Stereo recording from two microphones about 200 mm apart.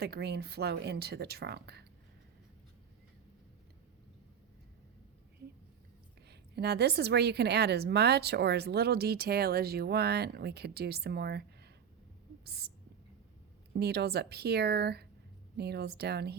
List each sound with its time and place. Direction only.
0.0 s a woman's voice: 55° right (ahead or behind)
6.2 s a woman's voice: 55° right (ahead or behind)
13.7 s a woman's voice: 55° right (ahead or behind)